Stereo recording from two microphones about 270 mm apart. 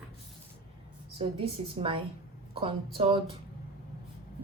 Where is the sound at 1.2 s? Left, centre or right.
Centre.